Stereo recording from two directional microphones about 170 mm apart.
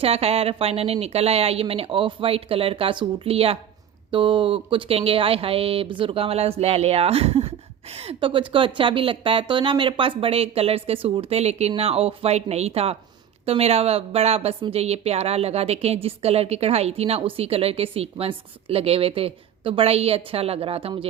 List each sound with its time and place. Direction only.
0.0 s a woman's voice: 35° right (ahead or behind)